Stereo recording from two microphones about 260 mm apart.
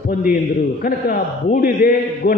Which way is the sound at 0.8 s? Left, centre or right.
Left.